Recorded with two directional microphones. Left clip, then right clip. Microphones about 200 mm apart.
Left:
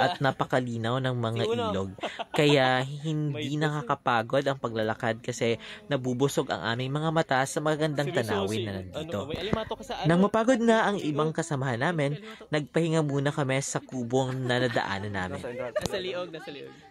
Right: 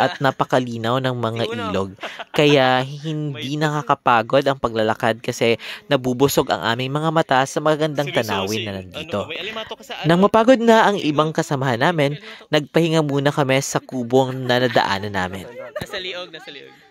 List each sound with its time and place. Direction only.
0.0 s speech: 35° right (ahead or behind)
10.0 s speech: 35° right (ahead or behind)
15.9 s speech: centre (ahead or behind)